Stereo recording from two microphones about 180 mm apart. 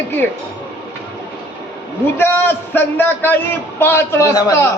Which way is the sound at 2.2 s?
10° left (ahead or behind).